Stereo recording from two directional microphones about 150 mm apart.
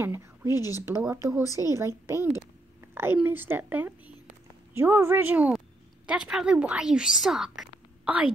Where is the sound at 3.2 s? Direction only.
15° right (ahead or behind).